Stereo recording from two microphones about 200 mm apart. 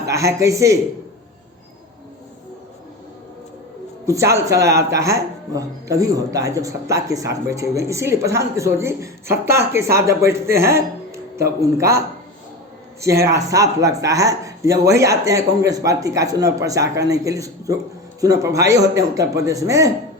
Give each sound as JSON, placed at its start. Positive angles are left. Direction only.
{"t": 0.1, "sound": "speech", "side_deg": -15}
{"t": 4.0, "sound": "speech", "side_deg": -15}
{"t": 13.2, "sound": "speech", "side_deg": -15}